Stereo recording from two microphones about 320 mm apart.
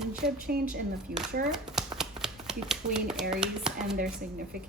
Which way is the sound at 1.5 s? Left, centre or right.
Centre.